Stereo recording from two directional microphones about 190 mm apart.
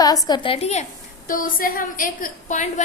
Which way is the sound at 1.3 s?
45° left (ahead or behind).